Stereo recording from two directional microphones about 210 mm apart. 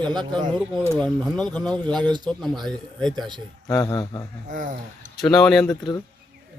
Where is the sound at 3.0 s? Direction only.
Centre (ahead or behind).